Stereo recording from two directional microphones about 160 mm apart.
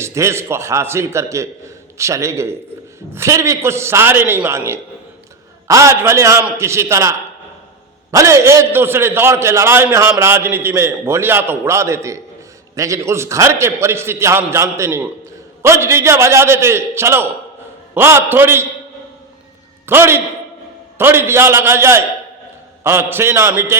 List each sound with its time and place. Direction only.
0.0 s a man's voice: 20° right (ahead or behind)
8.1 s a man's voice: 20° right (ahead or behind)
19.8 s a man's voice: 15° right (ahead or behind)